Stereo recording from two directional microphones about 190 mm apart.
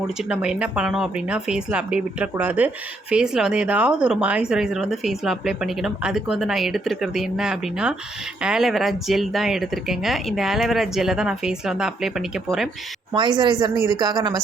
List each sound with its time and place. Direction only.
0.3 s speech: 5° right (ahead or behind)
13.1 s speech: 25° right (ahead or behind)